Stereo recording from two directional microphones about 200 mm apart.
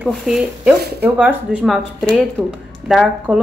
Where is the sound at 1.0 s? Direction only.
5° right (ahead or behind).